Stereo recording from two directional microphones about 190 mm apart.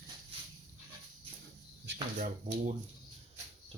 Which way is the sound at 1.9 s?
70° right (ahead or behind).